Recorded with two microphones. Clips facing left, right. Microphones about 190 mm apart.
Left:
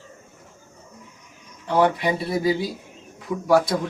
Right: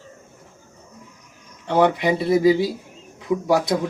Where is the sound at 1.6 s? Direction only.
25° right (ahead or behind).